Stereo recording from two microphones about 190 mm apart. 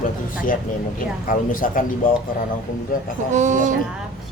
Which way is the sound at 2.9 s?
45° left (ahead or behind).